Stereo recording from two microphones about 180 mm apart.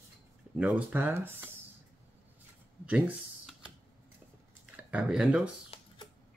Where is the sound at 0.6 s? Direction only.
5° right (ahead or behind).